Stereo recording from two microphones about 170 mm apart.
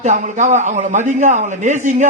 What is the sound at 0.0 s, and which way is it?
A man's voice, 45° right (ahead or behind).